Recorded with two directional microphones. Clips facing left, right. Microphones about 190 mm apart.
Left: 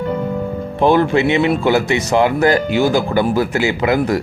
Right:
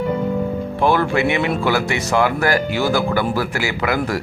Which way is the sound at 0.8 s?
20° left (ahead or behind).